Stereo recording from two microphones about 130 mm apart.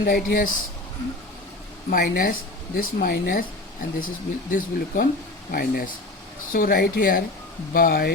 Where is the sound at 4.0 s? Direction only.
90° left.